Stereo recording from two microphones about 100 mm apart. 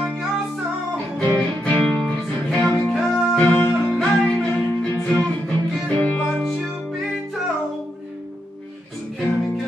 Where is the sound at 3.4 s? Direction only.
20° left (ahead or behind).